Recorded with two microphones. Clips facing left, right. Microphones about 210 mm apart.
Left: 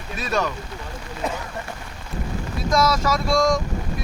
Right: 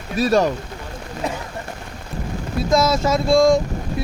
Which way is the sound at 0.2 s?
35° right (ahead or behind).